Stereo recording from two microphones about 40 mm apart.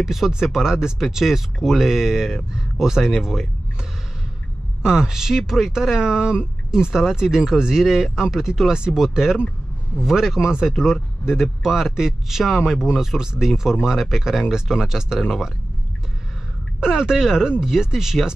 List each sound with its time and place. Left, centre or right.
0.0 s speech: centre
4.8 s speech: centre
16.8 s speech: centre